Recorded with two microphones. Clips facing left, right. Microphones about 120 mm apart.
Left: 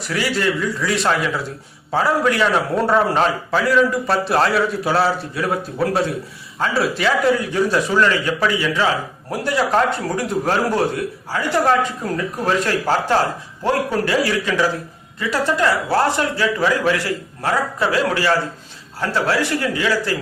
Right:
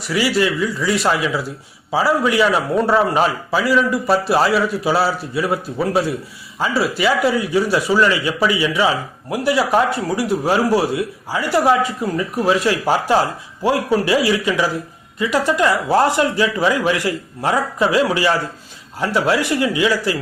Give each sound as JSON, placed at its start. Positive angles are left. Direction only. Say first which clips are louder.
{"t": 0.0, "sound": "a man's voice", "louder": "right 3 dB", "side_deg": -5}